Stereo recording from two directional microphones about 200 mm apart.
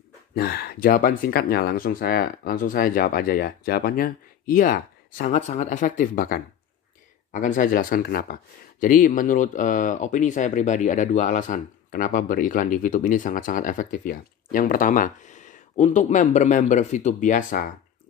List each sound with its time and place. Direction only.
0.3 s speech: 50° left (ahead or behind)